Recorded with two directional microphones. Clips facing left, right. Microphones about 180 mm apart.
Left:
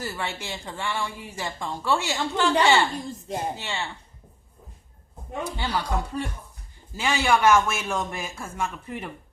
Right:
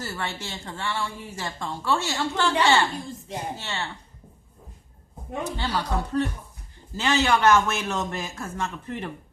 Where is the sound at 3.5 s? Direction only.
15° left (ahead or behind).